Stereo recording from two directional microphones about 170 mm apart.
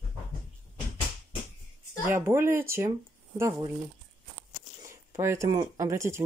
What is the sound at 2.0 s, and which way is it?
Speech, 15° right (ahead or behind).